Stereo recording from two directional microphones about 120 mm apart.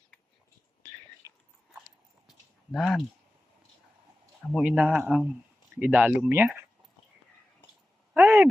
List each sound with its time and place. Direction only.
1.2 s biting: 25° right (ahead or behind)
2.7 s speech: centre (ahead or behind)
4.5 s speech: 10° right (ahead or behind)
8.1 s a sound: 15° right (ahead or behind)